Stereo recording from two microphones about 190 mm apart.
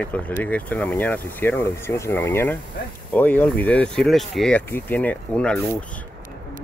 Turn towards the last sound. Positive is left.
turn(degrees=5)  # may be behind; listen again after turning